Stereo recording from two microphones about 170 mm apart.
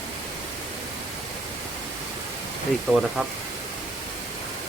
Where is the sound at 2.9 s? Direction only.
Centre (ahead or behind).